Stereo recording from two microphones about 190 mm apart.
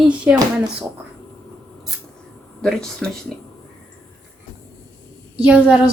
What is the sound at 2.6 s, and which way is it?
Speech, centre (ahead or behind).